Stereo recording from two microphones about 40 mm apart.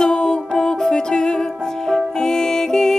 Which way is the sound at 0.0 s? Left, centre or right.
Centre.